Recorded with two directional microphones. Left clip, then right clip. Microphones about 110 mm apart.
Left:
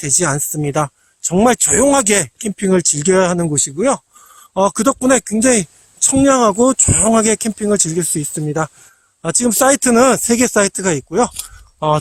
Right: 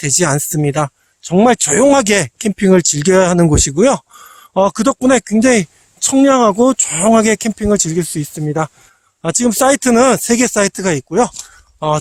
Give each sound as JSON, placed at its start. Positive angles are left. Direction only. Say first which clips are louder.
{"t": 0.0, "sound": "speech", "louder": "right 2 dB", "side_deg": -50}
{"t": 0.6, "sound": "a woman's voice", "louder": "right 1 dB", "side_deg": -35}
{"t": 1.8, "sound": "speech", "louder": "right 3 dB", "side_deg": -50}
{"t": 3.4, "sound": "speech", "louder": "right 5 dB", "side_deg": -80}
{"t": 4.5, "sound": "a woman's voice", "louder": "right 1 dB", "side_deg": -40}
{"t": 7.1, "sound": "a woman's voice", "louder": "right 5 dB", "side_deg": -35}
{"t": 11.3, "sound": "a sound", "louder": "left 1 dB", "side_deg": 15}